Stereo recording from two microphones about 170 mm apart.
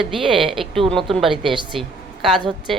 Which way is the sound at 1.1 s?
Centre (ahead or behind).